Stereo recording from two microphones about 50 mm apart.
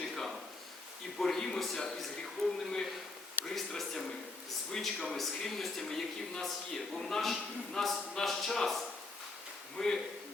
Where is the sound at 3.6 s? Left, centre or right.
Centre.